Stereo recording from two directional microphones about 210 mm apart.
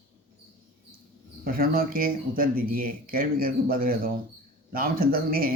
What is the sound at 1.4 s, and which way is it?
Speech, 45° right (ahead or behind).